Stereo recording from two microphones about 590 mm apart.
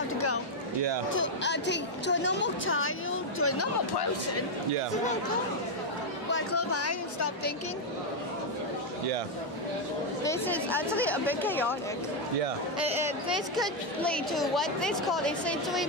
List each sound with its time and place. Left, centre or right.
1.1 s a woman's voice: centre
6.3 s a woman's voice: left
10.2 s a woman's voice: centre
12.8 s a woman's voice: centre